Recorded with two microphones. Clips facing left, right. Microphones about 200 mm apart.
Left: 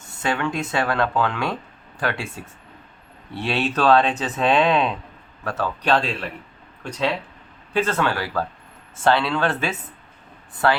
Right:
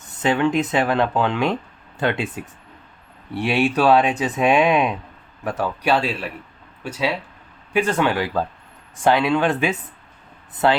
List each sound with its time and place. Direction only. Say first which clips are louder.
0.0 s speech: right 5 dB; 20° right (ahead or behind)